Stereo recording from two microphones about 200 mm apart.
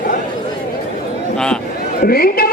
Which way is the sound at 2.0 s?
50° left (ahead or behind).